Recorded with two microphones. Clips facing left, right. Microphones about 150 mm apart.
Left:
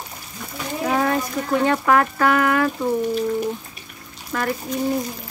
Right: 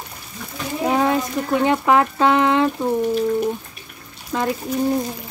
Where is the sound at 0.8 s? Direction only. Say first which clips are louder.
Right 2 dB; 20° right (ahead or behind).